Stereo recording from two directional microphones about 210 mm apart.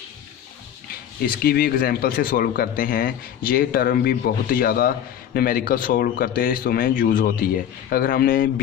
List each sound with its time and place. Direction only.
1.2 s speech: 45° left (ahead or behind)